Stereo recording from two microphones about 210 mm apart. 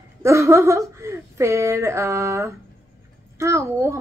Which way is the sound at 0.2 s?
15° right (ahead or behind).